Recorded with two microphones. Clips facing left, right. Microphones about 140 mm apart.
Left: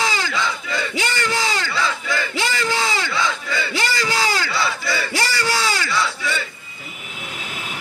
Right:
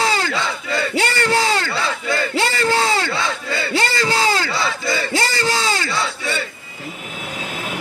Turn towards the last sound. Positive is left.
turn(degrees=-25)  # may be behind; listen again after turning